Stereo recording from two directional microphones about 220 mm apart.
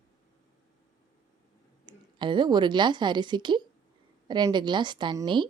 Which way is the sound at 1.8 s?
20° right (ahead or behind).